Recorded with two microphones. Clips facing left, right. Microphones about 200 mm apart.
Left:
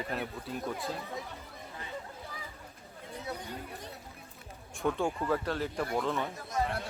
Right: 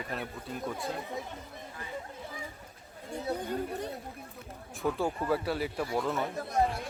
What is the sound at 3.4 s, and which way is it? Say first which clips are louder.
Speech: right 9 dB; 55° right (ahead or behind).